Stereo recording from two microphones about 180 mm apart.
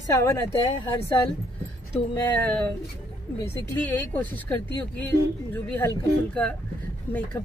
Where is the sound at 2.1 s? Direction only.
15° left (ahead or behind).